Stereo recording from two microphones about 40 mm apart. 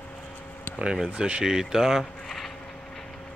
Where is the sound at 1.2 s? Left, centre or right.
Right.